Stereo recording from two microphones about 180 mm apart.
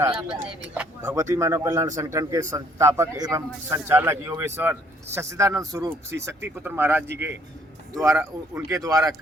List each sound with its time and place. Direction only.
0.7 s a man's voice: 10° right (ahead or behind)